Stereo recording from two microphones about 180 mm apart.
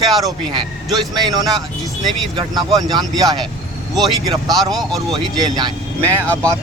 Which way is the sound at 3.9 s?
Centre (ahead or behind).